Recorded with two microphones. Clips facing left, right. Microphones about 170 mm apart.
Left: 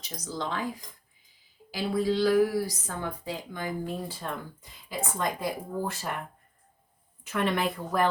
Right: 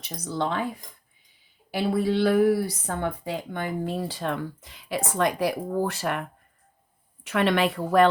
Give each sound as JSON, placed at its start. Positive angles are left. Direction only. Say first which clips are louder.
{"t": 0.0, "sound": "speech", "louder": "right 6 dB", "side_deg": -60}
{"t": 1.7, "sound": "a woman's voice", "louder": "right 3 dB", "side_deg": -60}
{"t": 7.3, "sound": "a woman's voice", "louder": "right 5 dB", "side_deg": -80}